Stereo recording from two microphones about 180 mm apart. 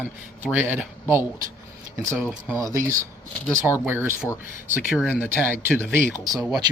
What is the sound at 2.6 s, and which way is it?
Speech, 15° right (ahead or behind).